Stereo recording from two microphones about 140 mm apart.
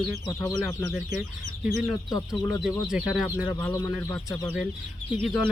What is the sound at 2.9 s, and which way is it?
Speech, 5° right (ahead or behind).